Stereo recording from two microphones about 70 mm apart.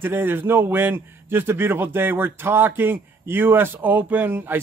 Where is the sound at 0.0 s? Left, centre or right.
Right.